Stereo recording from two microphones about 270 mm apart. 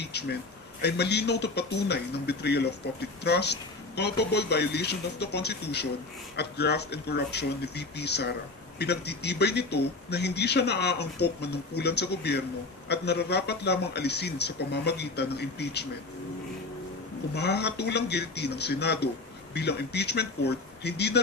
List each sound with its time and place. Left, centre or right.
0.0 s a sound: left
0.8 s speech: left
17.3 s speech: left